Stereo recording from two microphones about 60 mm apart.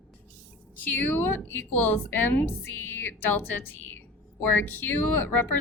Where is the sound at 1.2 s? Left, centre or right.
Left.